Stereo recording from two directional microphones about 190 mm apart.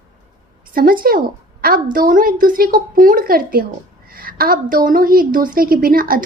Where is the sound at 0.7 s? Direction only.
50° right (ahead or behind).